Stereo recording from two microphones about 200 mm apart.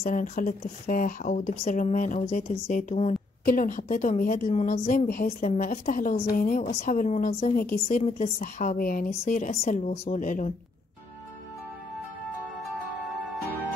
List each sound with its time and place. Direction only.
0.0 s a woman's voice: 40° left (ahead or behind)